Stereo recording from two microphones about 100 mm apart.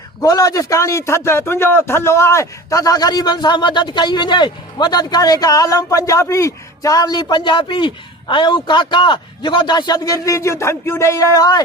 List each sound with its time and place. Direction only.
0.2 s a man's voice: 35° left (ahead or behind)